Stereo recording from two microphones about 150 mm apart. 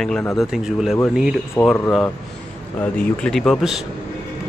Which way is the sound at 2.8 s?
10° left (ahead or behind).